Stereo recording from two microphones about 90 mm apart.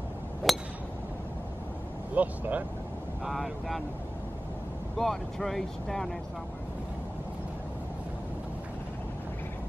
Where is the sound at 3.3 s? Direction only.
Centre (ahead or behind).